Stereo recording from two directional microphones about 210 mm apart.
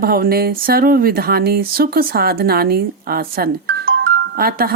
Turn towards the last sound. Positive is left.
turn(degrees=-45)  # may be behind; listen again after turning